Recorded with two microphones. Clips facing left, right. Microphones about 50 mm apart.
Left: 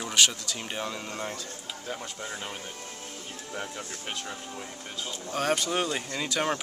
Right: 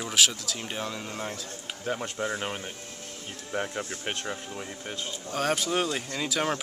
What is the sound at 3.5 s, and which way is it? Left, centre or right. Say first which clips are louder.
Speech: right 6 dB; right.